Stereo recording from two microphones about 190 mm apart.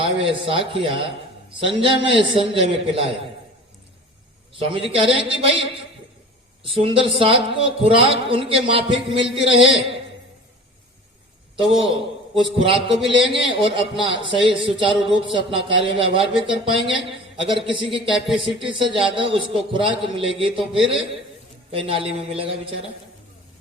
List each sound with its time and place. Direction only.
0.0 s a man's voice: 30° right (ahead or behind)
4.5 s a man's voice: 30° right (ahead or behind)
6.7 s a man's voice: 30° right (ahead or behind)
11.9 s a man's voice: 25° right (ahead or behind)